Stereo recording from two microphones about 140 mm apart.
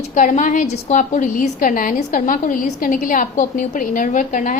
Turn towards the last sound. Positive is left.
turn(degrees=65)  # may be behind; listen again after turning